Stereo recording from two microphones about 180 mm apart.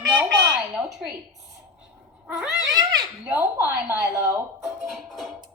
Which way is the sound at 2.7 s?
20° right (ahead or behind).